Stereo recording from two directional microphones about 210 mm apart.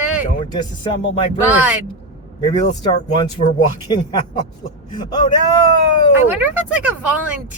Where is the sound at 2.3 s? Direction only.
20° left (ahead or behind).